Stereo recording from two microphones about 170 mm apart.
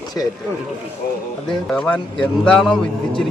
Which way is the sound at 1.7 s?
5° left (ahead or behind).